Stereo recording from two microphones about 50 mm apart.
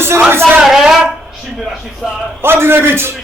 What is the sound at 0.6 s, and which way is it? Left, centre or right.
Speech, centre.